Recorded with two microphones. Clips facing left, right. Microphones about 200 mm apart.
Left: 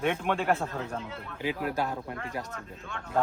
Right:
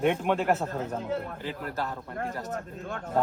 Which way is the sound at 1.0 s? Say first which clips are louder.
Right 9 dB; 45° right (ahead or behind).